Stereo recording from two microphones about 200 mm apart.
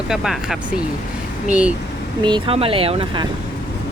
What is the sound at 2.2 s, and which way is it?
Speech, 25° right (ahead or behind).